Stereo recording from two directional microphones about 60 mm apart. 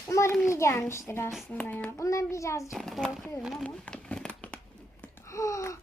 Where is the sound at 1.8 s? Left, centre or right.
Left.